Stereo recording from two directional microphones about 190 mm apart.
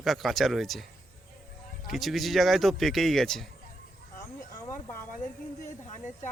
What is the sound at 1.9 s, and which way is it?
Speech, centre (ahead or behind).